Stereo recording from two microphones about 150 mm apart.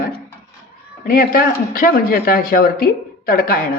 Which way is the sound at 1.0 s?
85° left.